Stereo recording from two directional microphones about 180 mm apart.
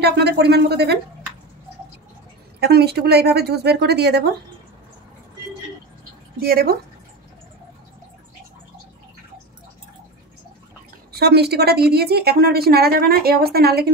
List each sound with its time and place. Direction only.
0.0 s a woman's voice: 65° right (ahead or behind)
2.6 s a woman's voice: 65° right (ahead or behind)
6.4 s a woman's voice: 60° right (ahead or behind)
11.1 s a woman's voice: 60° right (ahead or behind)